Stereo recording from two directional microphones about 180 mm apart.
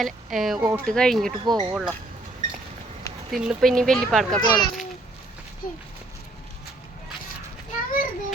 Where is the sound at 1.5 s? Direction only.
20° right (ahead or behind).